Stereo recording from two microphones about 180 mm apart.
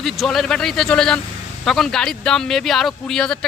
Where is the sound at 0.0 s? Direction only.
Centre (ahead or behind).